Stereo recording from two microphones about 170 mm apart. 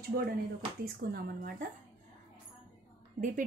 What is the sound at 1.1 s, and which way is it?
Speech, 55° right (ahead or behind).